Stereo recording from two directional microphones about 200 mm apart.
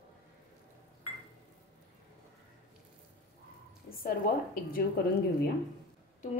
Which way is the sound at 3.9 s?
45° left (ahead or behind).